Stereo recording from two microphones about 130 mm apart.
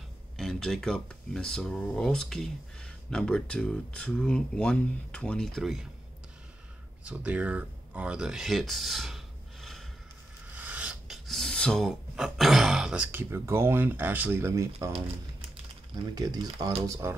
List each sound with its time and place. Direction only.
0.4 s speech: 5° left (ahead or behind)
7.1 s speech: 10° right (ahead or behind)
10.5 s filing: 10° right (ahead or behind)
11.2 s speech: 5° left (ahead or behind); by 14.9 s 25° right (ahead or behind)
16.2 s speech: 30° right (ahead or behind)